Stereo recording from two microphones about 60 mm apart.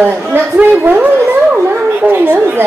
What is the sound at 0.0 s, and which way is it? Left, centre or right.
Speech, right.